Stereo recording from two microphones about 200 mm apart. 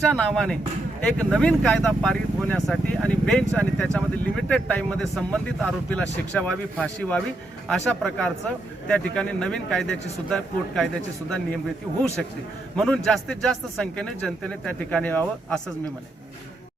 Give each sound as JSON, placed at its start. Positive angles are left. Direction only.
{"t": 0.0, "sound": "speech", "side_deg": 0}
{"t": 12.7, "sound": "speech", "side_deg": 5}